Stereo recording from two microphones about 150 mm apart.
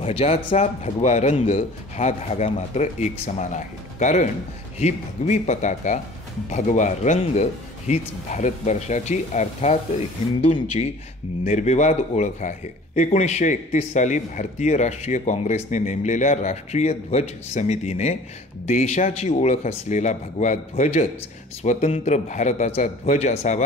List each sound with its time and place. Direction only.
0.0 s speech: 40° left (ahead or behind)